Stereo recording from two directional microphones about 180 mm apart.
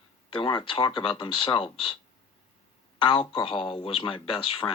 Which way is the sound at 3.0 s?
30° left (ahead or behind).